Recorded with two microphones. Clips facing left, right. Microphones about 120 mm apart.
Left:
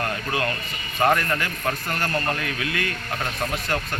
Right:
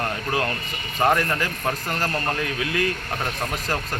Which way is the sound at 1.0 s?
15° right (ahead or behind).